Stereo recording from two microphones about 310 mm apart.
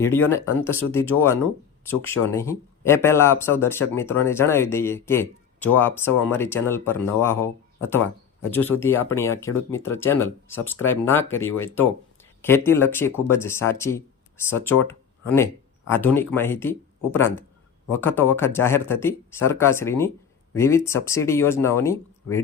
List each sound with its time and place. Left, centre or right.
0.3 s speech: centre
14.8 s a sound: centre
15.9 s speech: centre